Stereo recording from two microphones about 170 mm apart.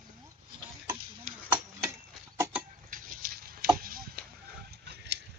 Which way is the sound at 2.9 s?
60° right (ahead or behind).